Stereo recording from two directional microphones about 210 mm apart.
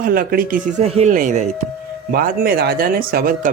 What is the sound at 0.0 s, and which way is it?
Speech, 45° right (ahead or behind).